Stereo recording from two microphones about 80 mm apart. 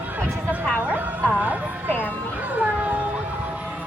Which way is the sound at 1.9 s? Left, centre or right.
Left.